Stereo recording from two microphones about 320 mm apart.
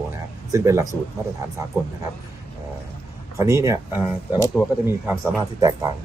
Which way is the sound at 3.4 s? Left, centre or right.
Centre.